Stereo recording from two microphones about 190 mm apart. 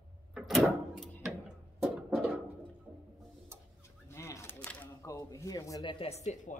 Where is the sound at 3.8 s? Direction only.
15° left (ahead or behind).